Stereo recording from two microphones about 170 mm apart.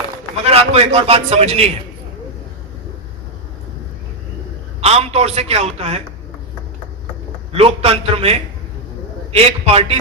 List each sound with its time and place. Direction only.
0.4 s a man's voice: 40° right (ahead or behind)
4.8 s a man's voice: 40° right (ahead or behind)
7.5 s a man's voice: 35° right (ahead or behind)